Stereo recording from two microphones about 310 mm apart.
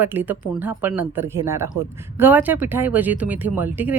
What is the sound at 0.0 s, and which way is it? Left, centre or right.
Speech, centre.